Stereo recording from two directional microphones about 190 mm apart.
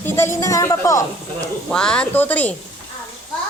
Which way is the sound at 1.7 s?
5° left (ahead or behind).